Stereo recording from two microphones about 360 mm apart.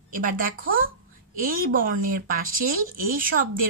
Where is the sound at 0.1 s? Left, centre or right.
Right.